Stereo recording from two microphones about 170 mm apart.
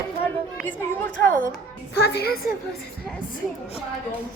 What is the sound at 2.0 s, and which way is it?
Speech, 70° left (ahead or behind).